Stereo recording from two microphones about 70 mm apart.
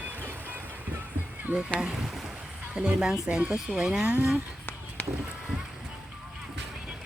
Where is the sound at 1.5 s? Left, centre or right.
Right.